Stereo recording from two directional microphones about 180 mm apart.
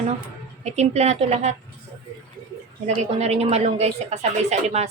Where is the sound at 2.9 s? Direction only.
35° right (ahead or behind).